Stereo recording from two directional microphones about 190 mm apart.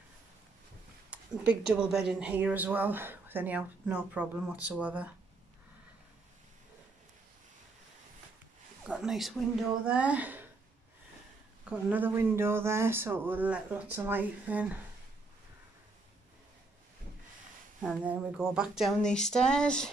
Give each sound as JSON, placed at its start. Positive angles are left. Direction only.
{"t": 1.1, "sound": "speech", "side_deg": -5}
{"t": 8.8, "sound": "a sound", "side_deg": -5}
{"t": 9.8, "sound": "speech", "side_deg": -5}
{"t": 11.6, "sound": "speech", "side_deg": -5}
{"t": 17.7, "sound": "speech", "side_deg": -5}